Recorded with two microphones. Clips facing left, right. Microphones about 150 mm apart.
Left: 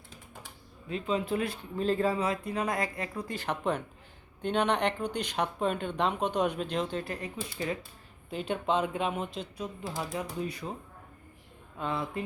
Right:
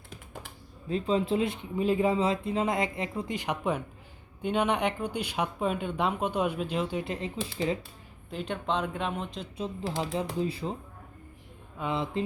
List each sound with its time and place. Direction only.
0.9 s speech: 35° right (ahead or behind); by 7.0 s 10° right (ahead or behind)
7.0 s speech: 25° right (ahead or behind)
8.3 s speech: centre (ahead or behind)
9.6 s speech: 25° right (ahead or behind)
11.9 s speech: 20° right (ahead or behind)